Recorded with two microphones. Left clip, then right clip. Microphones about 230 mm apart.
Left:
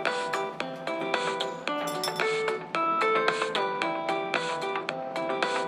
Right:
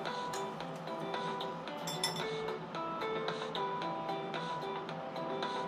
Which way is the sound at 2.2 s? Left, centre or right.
Left.